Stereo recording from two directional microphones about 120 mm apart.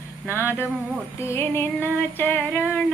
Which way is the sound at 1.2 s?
20° left (ahead or behind).